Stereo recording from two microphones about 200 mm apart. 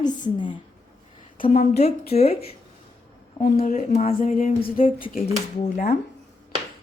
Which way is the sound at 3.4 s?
45° left (ahead or behind).